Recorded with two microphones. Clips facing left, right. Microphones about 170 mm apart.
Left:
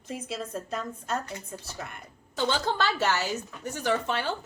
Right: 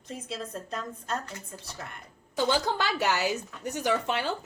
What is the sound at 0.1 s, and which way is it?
A woman's voice, 5° left (ahead or behind).